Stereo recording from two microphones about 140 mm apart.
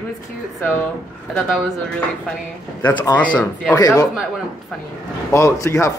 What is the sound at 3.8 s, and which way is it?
Speech, 25° left (ahead or behind).